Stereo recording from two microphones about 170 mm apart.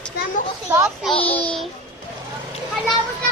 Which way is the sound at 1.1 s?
35° left (ahead or behind).